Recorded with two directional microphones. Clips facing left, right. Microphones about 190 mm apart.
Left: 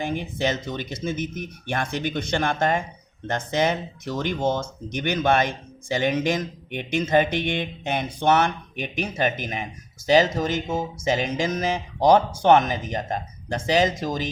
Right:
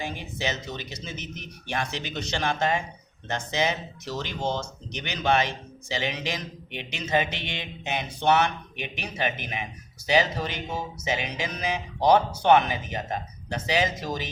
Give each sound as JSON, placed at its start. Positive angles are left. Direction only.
{"t": 0.0, "sound": "speech", "side_deg": 55}